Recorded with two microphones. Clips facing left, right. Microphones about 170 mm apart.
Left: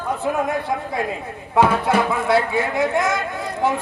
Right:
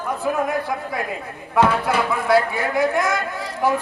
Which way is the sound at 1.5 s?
25° left (ahead or behind).